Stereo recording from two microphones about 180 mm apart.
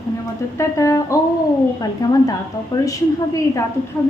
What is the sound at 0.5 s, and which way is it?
A woman's voice, 15° left (ahead or behind).